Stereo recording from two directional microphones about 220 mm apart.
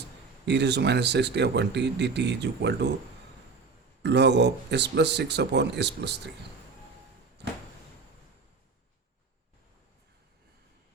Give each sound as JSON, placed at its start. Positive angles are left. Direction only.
{"t": 0.4, "sound": "speech", "side_deg": -50}
{"t": 4.0, "sound": "speech", "side_deg": -50}